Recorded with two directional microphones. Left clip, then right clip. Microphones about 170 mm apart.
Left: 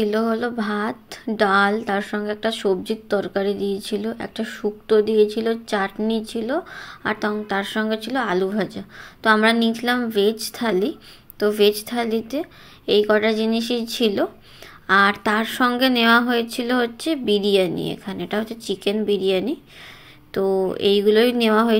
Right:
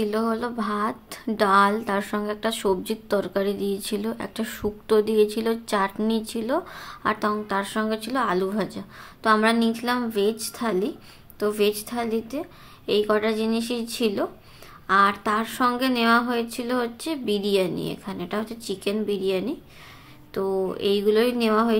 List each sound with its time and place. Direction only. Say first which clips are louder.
0.0 s a woman's voice: left 4 dB; 15° left (ahead or behind)